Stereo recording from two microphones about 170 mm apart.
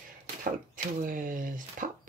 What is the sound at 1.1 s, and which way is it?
Speech, 50° right (ahead or behind).